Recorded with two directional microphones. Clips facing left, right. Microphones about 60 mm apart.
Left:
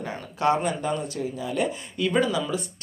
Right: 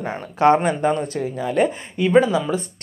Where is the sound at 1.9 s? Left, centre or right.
Right.